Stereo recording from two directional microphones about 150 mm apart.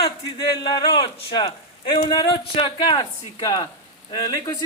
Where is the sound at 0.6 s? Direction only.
30° left (ahead or behind).